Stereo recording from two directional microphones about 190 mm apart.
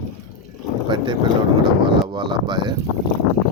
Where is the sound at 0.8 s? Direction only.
25° right (ahead or behind).